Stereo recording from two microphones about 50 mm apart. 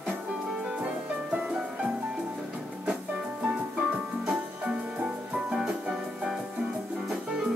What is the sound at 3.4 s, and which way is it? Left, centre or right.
Music, right.